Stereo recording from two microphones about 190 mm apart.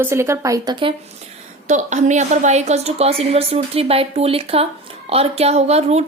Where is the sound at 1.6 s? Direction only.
40° right (ahead or behind).